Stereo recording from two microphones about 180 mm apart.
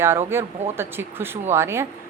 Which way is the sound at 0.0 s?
15° right (ahead or behind).